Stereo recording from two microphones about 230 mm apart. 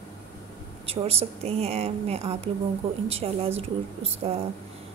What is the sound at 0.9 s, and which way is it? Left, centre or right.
A woman's voice, right.